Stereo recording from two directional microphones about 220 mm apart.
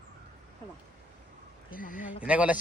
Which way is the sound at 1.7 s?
40° left (ahead or behind).